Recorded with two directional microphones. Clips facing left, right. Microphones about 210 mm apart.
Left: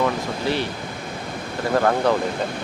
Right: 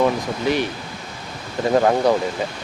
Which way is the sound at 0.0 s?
15° right (ahead or behind).